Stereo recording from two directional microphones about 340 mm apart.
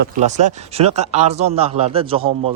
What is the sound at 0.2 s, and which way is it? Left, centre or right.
A man's voice, right.